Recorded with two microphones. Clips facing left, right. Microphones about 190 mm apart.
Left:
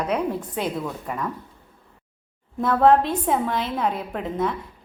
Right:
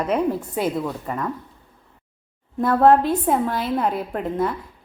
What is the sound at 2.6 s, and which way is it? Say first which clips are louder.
A woman's voice: right 2 dB; 5° right (ahead or behind).